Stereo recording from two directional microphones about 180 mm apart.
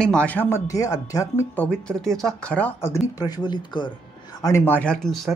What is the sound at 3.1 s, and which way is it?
Speech, 20° left (ahead or behind).